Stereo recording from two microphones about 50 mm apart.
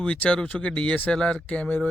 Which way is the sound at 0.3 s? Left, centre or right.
Left.